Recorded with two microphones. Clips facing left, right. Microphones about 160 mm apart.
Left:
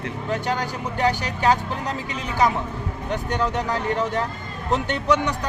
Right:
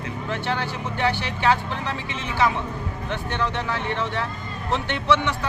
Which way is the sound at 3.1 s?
40° left (ahead or behind).